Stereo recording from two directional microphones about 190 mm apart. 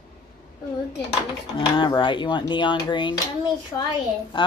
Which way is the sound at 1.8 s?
25° left (ahead or behind).